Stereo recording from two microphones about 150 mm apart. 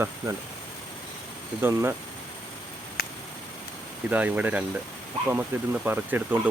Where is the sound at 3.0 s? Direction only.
90° left.